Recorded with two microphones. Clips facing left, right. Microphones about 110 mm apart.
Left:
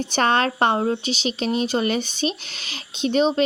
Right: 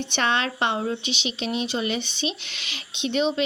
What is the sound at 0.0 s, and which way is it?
Speech, 40° left (ahead or behind).